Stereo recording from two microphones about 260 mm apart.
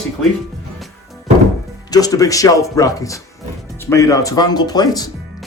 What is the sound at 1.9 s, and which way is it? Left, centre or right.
Speech, centre.